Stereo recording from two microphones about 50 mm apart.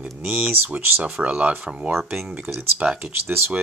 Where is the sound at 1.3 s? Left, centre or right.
Right.